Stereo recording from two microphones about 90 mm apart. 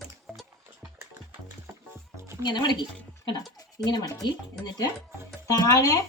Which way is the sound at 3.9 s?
45° left (ahead or behind).